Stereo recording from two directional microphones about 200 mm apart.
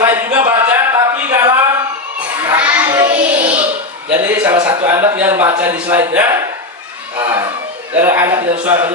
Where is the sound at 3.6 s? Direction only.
10° right (ahead or behind).